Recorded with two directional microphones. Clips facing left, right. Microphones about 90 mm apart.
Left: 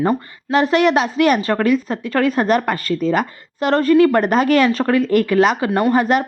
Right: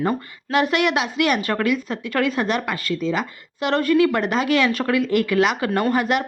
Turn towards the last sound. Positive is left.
turn(degrees=35)  # may be behind; listen again after turning